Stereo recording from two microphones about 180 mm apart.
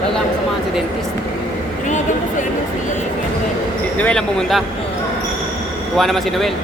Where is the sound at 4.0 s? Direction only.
5° left (ahead or behind).